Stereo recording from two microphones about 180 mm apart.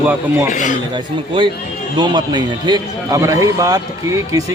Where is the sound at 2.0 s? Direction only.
25° right (ahead or behind).